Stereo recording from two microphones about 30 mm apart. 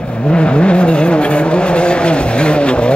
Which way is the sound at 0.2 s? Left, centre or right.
Left.